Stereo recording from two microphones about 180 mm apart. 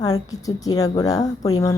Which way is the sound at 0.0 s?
20° left (ahead or behind).